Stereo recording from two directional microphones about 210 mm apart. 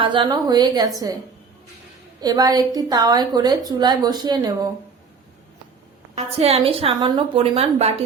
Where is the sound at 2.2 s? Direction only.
20° right (ahead or behind).